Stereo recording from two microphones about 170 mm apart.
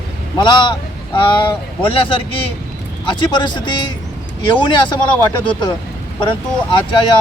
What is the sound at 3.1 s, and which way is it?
Speech, 25° left (ahead or behind).